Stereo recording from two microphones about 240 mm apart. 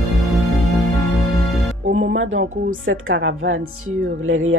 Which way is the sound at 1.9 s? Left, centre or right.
Right.